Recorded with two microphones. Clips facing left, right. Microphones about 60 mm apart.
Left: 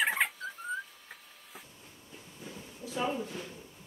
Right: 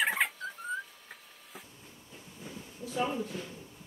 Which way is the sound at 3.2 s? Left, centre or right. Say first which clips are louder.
Right 1 dB; centre.